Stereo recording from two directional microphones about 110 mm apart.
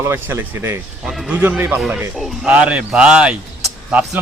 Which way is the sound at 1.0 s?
Centre (ahead or behind).